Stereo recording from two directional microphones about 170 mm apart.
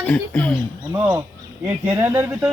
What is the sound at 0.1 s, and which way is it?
Speech, 10° left (ahead or behind).